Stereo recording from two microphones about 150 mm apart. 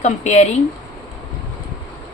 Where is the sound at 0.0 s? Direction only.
50° left (ahead or behind).